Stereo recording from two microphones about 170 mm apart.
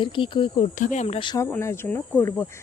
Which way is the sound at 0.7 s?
45° left (ahead or behind).